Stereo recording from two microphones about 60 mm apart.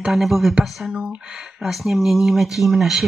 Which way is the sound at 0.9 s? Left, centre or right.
Centre.